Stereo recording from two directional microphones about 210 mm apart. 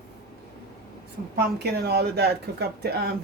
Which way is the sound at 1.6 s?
50° right (ahead or behind).